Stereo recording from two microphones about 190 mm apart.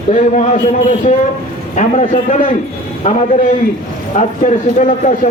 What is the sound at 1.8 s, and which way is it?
A man's voice, 40° left (ahead or behind).